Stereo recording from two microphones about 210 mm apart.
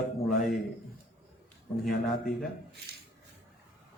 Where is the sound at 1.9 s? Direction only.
Centre (ahead or behind).